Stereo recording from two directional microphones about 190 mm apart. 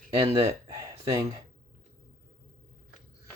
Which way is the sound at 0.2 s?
20° right (ahead or behind).